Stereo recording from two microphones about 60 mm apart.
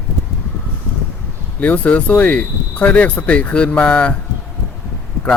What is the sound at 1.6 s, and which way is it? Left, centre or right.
Speech, left.